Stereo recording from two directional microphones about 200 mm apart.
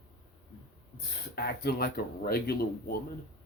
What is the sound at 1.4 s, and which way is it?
Speech, 50° left (ahead or behind).